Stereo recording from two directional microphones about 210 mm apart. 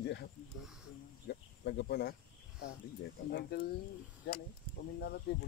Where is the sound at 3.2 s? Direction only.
45° left (ahead or behind).